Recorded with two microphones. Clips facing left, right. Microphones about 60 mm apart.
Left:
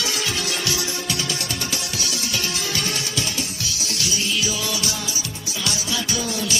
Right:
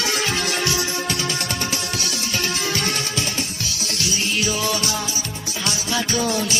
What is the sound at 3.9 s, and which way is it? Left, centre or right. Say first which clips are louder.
Music: right 2 dB; right.